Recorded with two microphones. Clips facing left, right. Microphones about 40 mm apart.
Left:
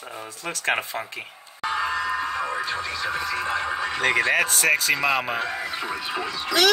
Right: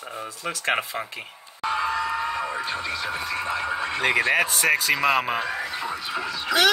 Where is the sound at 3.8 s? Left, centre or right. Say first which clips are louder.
Even; centre.